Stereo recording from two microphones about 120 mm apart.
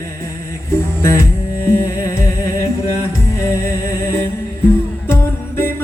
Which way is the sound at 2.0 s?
25° left (ahead or behind).